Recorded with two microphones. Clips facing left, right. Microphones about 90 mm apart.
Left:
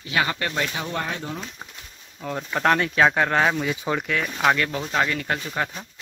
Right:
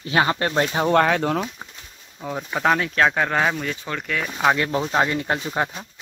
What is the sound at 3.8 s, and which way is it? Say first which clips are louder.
Speech: left 4 dB; 15° left (ahead or behind).